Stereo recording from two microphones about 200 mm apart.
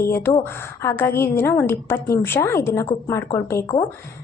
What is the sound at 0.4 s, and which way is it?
A woman's voice, 10° left (ahead or behind).